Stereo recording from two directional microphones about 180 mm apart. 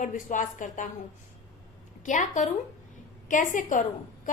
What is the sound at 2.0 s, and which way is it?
A woman's voice, 45° left (ahead or behind).